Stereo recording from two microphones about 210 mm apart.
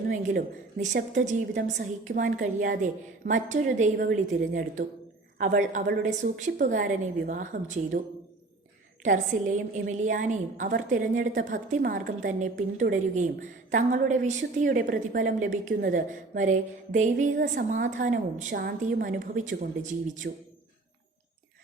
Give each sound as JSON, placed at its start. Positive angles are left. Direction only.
{"t": 0.1, "sound": "a woman's voice", "side_deg": -35}
{"t": 9.0, "sound": "a woman's voice", "side_deg": -35}